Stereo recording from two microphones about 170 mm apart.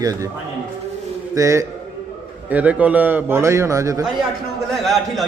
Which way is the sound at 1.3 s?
20° right (ahead or behind).